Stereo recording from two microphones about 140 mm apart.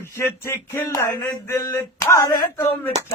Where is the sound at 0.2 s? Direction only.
20° left (ahead or behind).